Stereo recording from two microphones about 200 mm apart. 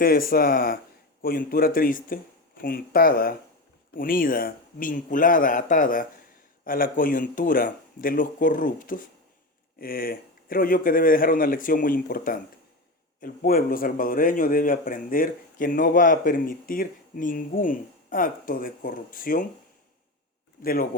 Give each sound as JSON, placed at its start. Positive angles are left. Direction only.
{"t": 0.0, "sound": "speech", "side_deg": 45}
{"t": 20.6, "sound": "speech", "side_deg": 45}